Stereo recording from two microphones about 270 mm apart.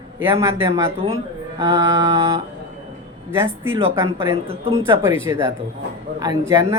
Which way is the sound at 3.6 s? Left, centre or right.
Centre.